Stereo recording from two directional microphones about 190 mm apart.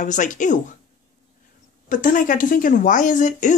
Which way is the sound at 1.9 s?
45° left (ahead or behind).